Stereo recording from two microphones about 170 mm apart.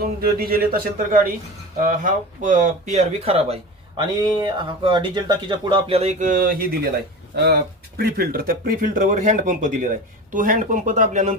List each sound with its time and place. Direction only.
0.0 s a man's voice: 60° right (ahead or behind)
7.3 s speech: 75° right (ahead or behind); by 11.3 s 45° right (ahead or behind)